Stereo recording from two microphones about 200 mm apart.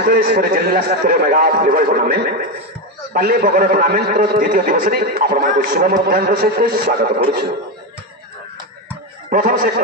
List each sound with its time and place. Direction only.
0.0 s a man's voice: 50° right (ahead or behind)
9.3 s a man's voice: 45° right (ahead or behind)